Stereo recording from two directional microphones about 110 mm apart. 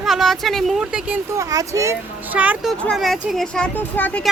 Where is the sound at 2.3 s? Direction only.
15° right (ahead or behind).